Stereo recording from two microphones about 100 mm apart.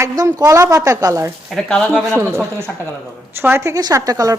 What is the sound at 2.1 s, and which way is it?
A woman's voice, 25° right (ahead or behind).